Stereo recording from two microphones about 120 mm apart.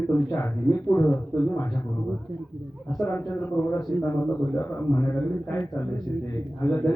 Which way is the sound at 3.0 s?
20° left (ahead or behind).